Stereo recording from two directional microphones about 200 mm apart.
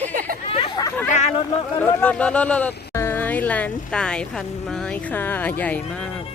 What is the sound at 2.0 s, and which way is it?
Speech, 5° left (ahead or behind).